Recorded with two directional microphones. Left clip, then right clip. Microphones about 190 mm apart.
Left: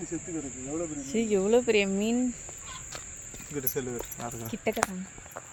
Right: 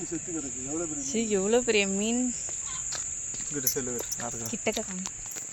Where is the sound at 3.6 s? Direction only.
35° left (ahead or behind).